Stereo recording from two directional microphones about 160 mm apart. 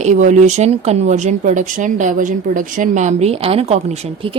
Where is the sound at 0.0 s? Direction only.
50° right (ahead or behind).